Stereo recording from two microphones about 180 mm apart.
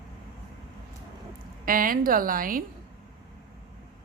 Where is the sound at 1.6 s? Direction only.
50° right (ahead or behind).